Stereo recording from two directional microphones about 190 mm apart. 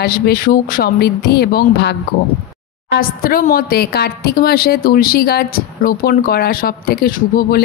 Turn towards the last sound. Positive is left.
turn(degrees=50)  # may be behind; listen again after turning